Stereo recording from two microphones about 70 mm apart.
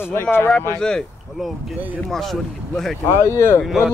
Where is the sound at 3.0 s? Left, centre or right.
Left.